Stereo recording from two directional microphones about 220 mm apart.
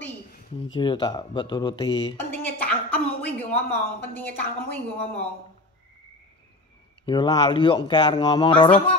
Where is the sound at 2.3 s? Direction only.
5° left (ahead or behind).